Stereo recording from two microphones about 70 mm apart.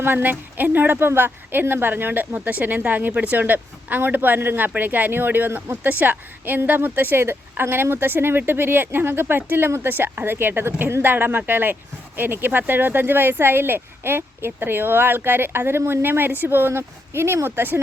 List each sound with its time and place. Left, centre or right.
0.0 s speech: right